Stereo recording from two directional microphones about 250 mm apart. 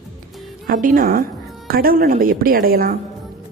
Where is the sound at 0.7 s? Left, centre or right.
Right.